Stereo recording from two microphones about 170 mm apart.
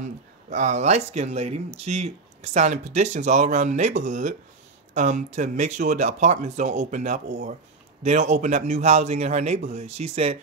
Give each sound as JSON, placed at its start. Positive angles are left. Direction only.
{"t": 0.0, "sound": "a man's voice", "side_deg": -45}